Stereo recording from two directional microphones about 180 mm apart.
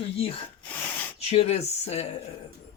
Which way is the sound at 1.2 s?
35° left (ahead or behind).